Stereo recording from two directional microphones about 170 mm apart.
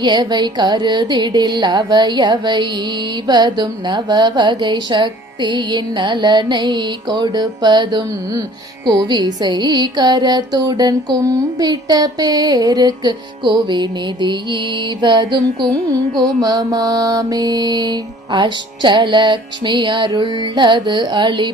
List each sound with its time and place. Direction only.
0.0 s music: 25° right (ahead or behind)